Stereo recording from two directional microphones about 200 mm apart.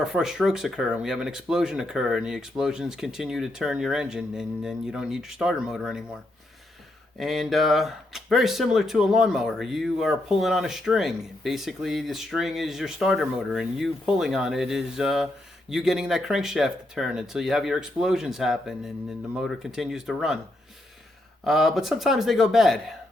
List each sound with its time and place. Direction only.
0.0 s speech: centre (ahead or behind)
7.2 s speech: centre (ahead or behind)
21.4 s speech: centre (ahead or behind)